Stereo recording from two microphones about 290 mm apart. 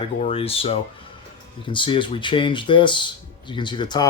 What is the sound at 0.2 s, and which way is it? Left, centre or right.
Speech, left.